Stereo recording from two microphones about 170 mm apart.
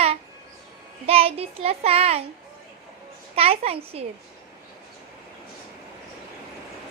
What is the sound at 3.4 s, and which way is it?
Child singing, 35° right (ahead or behind).